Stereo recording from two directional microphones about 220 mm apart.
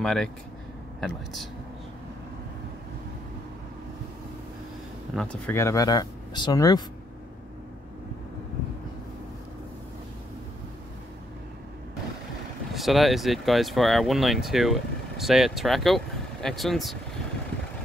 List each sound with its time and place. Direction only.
0.0 s speech: centre (ahead or behind)
5.1 s speech: 5° left (ahead or behind)
12.7 s speech: centre (ahead or behind)